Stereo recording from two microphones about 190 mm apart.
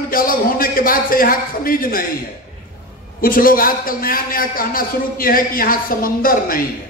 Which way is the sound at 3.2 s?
50° left (ahead or behind).